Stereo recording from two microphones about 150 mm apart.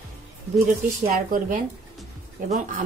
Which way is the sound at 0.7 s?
65° right (ahead or behind).